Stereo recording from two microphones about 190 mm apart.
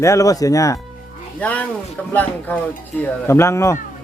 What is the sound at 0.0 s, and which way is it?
Speech, 15° left (ahead or behind).